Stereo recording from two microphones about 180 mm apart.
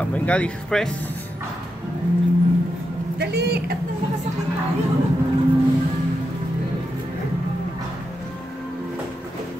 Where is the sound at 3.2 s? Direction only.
65° right (ahead or behind).